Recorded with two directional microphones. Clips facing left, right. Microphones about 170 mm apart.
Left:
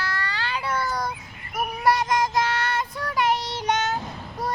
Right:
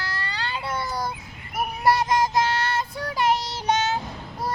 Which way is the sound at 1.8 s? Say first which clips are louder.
Right 1 dB; 25° right (ahead or behind).